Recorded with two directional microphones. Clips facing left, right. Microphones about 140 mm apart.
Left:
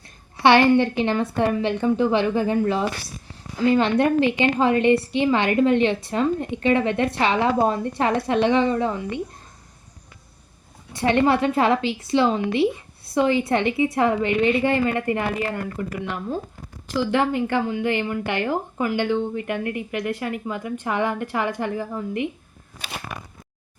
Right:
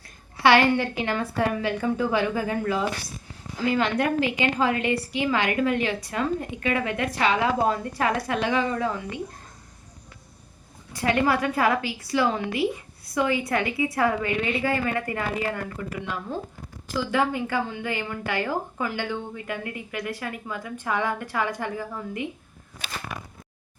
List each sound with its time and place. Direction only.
0.4 s a woman's voice: 25° left (ahead or behind)
10.9 s a woman's voice: 25° left (ahead or behind)